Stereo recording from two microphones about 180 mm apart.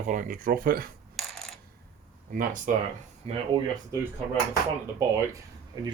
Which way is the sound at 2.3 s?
50° right (ahead or behind).